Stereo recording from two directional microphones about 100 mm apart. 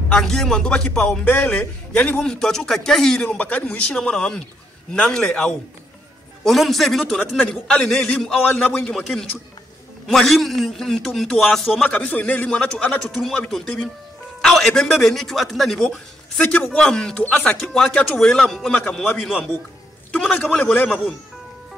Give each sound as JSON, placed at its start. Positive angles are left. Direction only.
{"t": 0.1, "sound": "a man's voice", "side_deg": 5}
{"t": 10.0, "sound": "a man's voice", "side_deg": 0}
{"t": 11.8, "sound": "a man's voice", "side_deg": 15}
{"t": 14.4, "sound": "a man's voice", "side_deg": 5}
{"t": 18.8, "sound": "a man's voice", "side_deg": 10}